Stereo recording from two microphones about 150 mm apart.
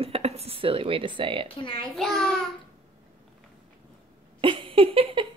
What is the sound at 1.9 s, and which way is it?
Speech, centre (ahead or behind).